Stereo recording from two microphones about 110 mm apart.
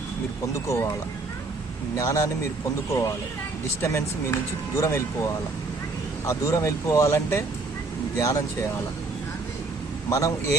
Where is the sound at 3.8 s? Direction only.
25° left (ahead or behind).